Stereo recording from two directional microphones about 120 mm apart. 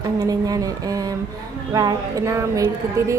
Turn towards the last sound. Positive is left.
turn(degrees=-25)  # may be behind; listen again after turning